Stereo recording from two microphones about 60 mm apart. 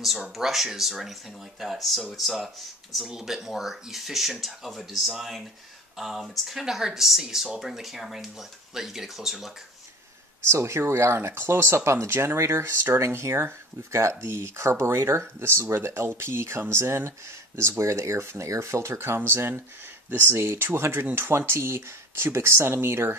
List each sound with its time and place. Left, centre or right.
0.3 s speech: centre
10.4 s speech: right